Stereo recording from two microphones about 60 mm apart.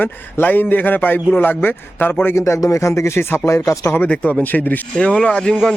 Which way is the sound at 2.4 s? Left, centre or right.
Left.